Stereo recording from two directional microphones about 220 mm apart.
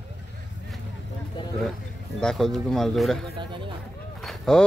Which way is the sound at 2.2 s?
Centre (ahead or behind).